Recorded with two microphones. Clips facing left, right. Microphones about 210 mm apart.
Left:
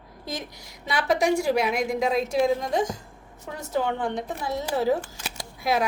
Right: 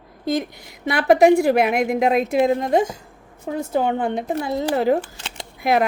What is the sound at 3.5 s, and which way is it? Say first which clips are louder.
Speech: right 11 dB; 35° right (ahead or behind).